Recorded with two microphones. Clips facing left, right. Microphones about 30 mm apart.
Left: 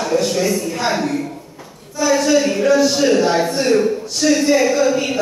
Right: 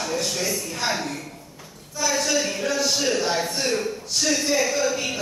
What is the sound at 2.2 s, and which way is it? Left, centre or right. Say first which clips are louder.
A man's voice: left 9 dB; centre.